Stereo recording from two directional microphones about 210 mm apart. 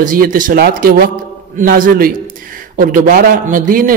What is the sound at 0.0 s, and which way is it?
A man's voice, 40° right (ahead or behind).